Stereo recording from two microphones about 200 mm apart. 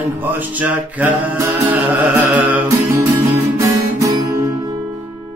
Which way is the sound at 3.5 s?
15° right (ahead or behind).